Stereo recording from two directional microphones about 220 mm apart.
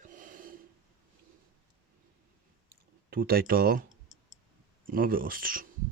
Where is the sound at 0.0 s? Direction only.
35° right (ahead or behind).